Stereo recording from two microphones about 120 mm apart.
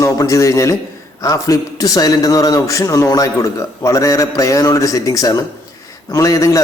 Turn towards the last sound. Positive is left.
turn(degrees=25)  # may be behind; listen again after turning